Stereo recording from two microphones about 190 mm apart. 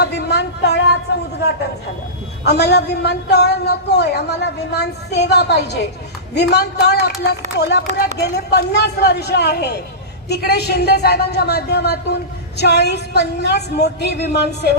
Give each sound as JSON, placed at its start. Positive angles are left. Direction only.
{"t": 0.0, "sound": "a woman's voice", "side_deg": 60}
{"t": 2.4, "sound": "a woman's voice", "side_deg": 60}